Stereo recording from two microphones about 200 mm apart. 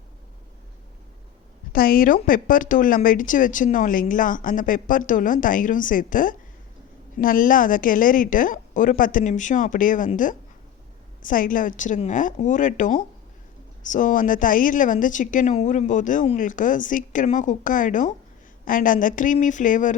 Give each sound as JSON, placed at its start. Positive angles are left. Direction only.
{"t": 1.7, "sound": "a woman's voice", "side_deg": 45}